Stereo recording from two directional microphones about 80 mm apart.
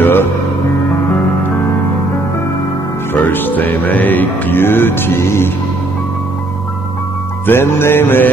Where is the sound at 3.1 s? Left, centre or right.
Left.